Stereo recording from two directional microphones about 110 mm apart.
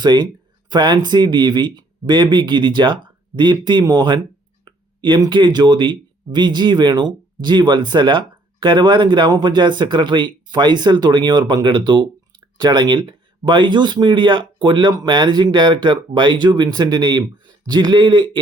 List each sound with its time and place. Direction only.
0.0 s speech: 40° right (ahead or behind)
4.6 s a sound: 45° right (ahead or behind)
5.3 s speech: 45° right (ahead or behind)